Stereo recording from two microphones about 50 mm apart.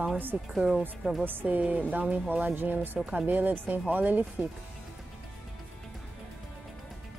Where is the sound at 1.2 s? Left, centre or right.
Right.